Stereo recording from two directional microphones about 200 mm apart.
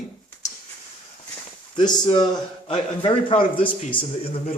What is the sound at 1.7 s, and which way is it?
A man's voice, 25° left (ahead or behind).